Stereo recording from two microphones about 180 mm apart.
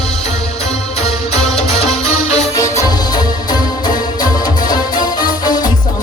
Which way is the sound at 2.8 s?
20° left (ahead or behind).